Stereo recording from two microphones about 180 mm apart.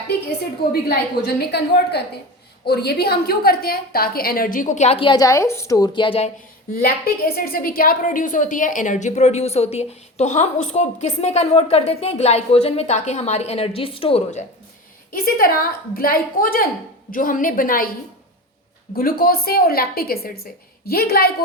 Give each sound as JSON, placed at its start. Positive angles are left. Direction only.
{"t": 0.7, "sound": "a woman's voice", "side_deg": 60}
{"t": 6.7, "sound": "a woman's voice", "side_deg": 55}
{"t": 15.1, "sound": "a woman's voice", "side_deg": 55}
{"t": 18.9, "sound": "a woman's voice", "side_deg": 55}